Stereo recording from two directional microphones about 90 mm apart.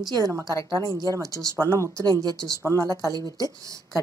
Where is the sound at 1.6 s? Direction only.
30° left (ahead or behind).